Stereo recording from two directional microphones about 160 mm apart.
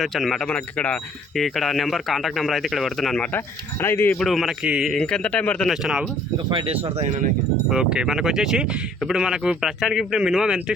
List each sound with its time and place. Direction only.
0.0 s speech: centre (ahead or behind)
3.3 s speech: 15° left (ahead or behind)
4.2 s speech: centre (ahead or behind)
6.5 s speech: 30° right (ahead or behind)
7.7 s speech: 5° right (ahead or behind)